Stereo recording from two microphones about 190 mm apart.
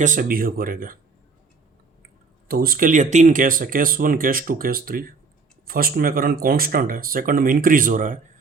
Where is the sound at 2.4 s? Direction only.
50° right (ahead or behind).